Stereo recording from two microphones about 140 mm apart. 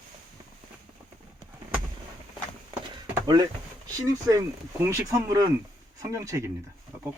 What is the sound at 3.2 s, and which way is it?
Speech, 30° right (ahead or behind).